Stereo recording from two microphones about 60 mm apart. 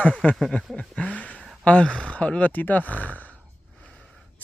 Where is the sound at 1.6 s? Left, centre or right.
Centre.